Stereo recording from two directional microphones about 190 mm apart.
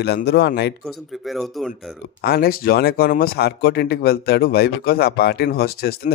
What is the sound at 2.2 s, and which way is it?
Speech, 55° left (ahead or behind).